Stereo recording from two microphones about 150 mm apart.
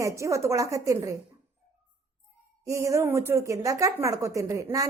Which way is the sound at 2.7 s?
20° right (ahead or behind).